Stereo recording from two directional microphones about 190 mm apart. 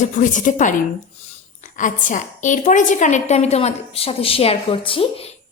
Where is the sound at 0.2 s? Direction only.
40° left (ahead or behind).